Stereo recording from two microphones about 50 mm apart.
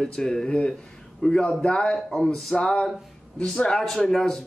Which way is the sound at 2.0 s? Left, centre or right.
Centre.